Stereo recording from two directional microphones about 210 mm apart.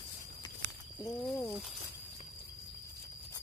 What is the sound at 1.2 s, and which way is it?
Speech, 5° left (ahead or behind).